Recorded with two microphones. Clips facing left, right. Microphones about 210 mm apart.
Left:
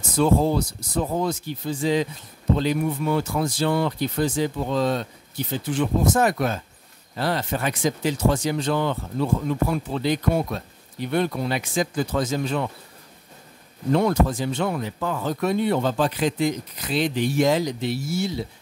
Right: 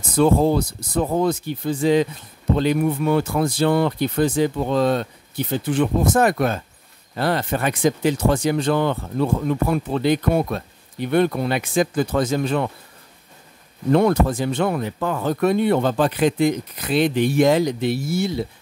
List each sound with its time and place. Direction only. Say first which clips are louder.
0.1 s speech: right 3 dB; 55° right (ahead or behind)
13.9 s speech: right 3 dB; 55° right (ahead or behind)